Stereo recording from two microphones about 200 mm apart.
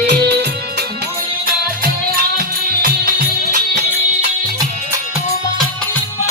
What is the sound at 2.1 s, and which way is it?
Music, 45° right (ahead or behind).